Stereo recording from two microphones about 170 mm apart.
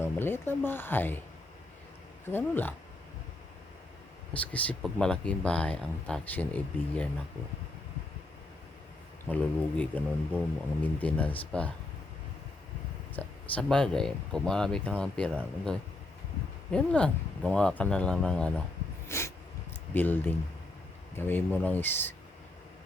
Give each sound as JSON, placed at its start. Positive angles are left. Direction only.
{"t": 0.0, "sound": "speech", "side_deg": 15}
{"t": 2.2, "sound": "speech", "side_deg": 10}
{"t": 4.4, "sound": "speech", "side_deg": 10}
{"t": 9.3, "sound": "speech", "side_deg": 10}
{"t": 13.1, "sound": "speech", "side_deg": 5}
{"t": 19.0, "sound": "a sound", "side_deg": 15}
{"t": 19.9, "sound": "speech", "side_deg": 10}